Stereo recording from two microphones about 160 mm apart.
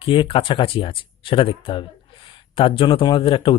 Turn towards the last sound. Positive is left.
turn(degrees=35)  # may be behind; listen again after turning